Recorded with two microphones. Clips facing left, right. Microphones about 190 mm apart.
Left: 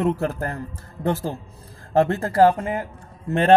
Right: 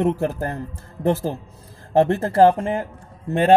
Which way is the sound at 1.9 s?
20° right (ahead or behind).